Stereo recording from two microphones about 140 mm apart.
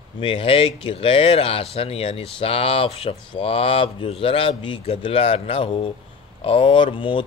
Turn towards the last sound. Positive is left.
turn(degrees=35)  # may be behind; listen again after turning